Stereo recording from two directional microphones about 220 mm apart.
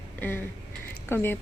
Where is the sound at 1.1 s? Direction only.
10° left (ahead or behind).